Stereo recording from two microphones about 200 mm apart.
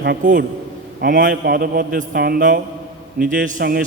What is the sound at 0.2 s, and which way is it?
A man's voice, 40° right (ahead or behind).